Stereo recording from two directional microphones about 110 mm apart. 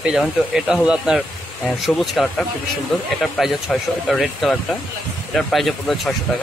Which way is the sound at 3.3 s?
Centre (ahead or behind).